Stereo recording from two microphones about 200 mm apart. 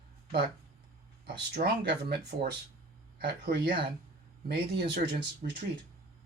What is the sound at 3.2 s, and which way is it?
Speech, 50° right (ahead or behind).